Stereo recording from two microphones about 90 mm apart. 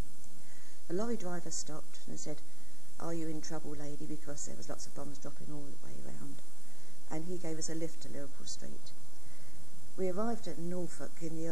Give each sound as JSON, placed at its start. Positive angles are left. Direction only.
{"t": 0.8, "sound": "a woman's voice", "side_deg": -40}
{"t": 9.9, "sound": "a woman's voice", "side_deg": -40}